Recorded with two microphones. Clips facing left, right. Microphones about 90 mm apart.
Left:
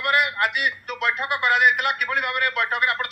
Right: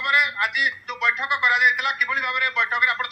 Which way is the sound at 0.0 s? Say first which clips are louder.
Left 1 dB; 50° left (ahead or behind).